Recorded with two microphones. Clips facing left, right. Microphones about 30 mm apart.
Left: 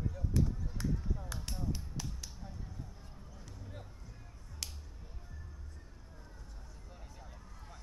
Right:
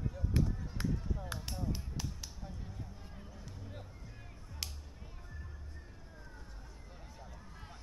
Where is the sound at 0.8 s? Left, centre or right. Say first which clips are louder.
Even; centre.